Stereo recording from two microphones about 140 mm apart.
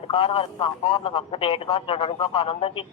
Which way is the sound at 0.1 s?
40° left (ahead or behind).